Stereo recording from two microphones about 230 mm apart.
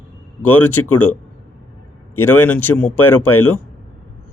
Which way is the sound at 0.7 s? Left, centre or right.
Left.